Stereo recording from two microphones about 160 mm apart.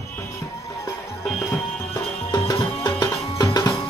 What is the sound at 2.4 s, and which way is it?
Music, 25° left (ahead or behind).